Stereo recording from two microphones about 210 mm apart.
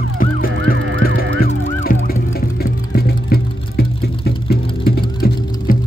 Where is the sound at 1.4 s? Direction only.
45° left (ahead or behind).